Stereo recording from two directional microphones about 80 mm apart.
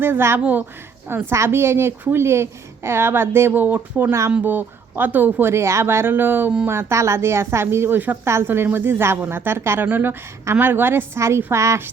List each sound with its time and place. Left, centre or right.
0.0 s a woman's voice: right